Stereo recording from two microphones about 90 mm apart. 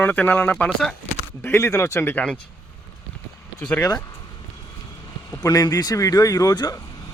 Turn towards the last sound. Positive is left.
turn(degrees=50)  # may be behind; listen again after turning